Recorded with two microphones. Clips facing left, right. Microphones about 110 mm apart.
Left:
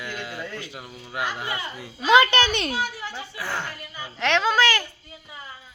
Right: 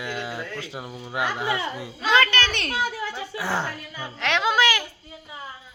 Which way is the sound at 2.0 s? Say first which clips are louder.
Left 4 dB; 15° left (ahead or behind).